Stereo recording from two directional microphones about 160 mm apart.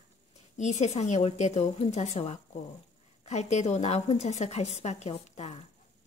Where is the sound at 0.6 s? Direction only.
45° left (ahead or behind).